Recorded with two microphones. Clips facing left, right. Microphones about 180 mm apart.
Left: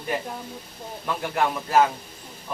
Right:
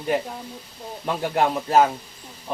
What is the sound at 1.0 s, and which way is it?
Speech, 25° right (ahead or behind).